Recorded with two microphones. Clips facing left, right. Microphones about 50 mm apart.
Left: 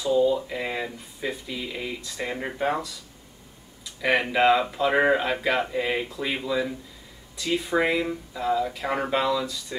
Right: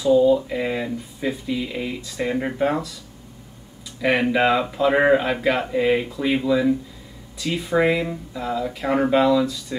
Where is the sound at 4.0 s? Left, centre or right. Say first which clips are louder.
Right 3 dB; centre.